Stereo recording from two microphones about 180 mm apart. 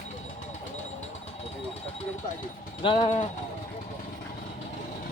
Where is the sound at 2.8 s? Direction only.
25° left (ahead or behind).